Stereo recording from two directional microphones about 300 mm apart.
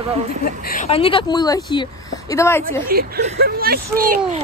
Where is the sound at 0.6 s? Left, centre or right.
Left; by 2.9 s centre.